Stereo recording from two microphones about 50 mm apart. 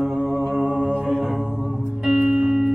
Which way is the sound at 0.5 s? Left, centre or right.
Right.